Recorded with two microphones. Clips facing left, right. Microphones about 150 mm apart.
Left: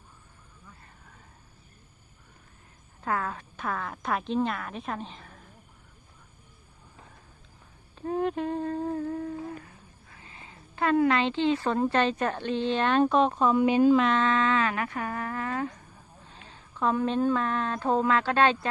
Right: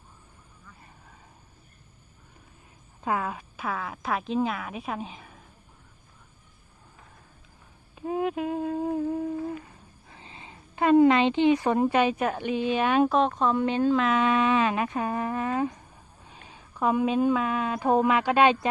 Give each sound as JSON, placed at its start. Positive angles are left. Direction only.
{"t": 3.0, "sound": "a woman's voice", "side_deg": -15}
{"t": 7.9, "sound": "humming", "side_deg": -5}
{"t": 10.1, "sound": "a woman's voice", "side_deg": -25}
{"t": 14.0, "sound": "a woman's voice", "side_deg": -10}